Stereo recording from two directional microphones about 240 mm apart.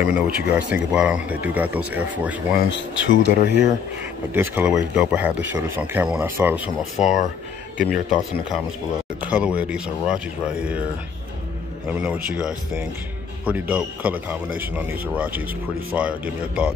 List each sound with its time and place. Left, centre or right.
0.0 s speech: centre
2.5 s speech: left
4.3 s speech: centre
9.2 s speech: centre
11.9 s speech: centre